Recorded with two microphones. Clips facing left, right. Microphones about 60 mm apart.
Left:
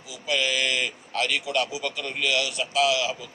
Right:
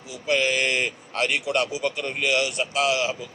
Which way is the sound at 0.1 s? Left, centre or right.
Right.